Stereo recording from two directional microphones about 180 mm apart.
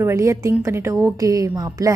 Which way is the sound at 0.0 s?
15° right (ahead or behind).